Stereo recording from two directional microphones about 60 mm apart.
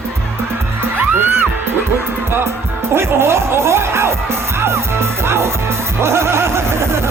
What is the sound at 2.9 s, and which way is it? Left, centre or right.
Music, right.